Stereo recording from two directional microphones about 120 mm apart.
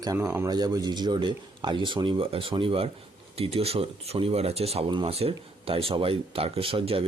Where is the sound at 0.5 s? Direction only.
35° right (ahead or behind).